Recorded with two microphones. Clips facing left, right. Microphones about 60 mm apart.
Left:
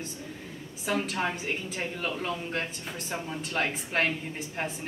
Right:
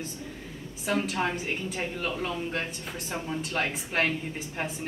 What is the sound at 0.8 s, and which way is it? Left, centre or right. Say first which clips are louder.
A woman's voice: right 1 dB; centre.